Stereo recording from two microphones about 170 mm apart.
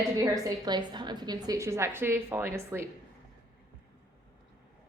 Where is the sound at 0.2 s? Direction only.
20° right (ahead or behind).